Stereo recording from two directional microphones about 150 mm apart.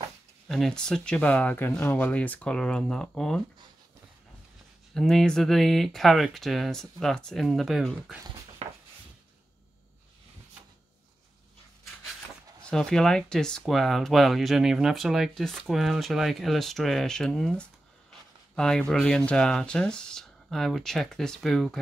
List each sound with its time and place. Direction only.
0.5 s speech: 5° left (ahead or behind)
4.9 s speech: 5° left (ahead or behind)
8.6 s a sound: 45° right (ahead or behind)
12.6 s speech: 5° left (ahead or behind)